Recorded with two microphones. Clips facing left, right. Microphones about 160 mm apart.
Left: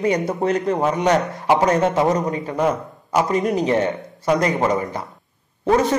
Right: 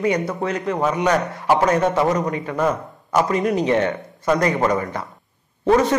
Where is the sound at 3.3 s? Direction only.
30° left (ahead or behind).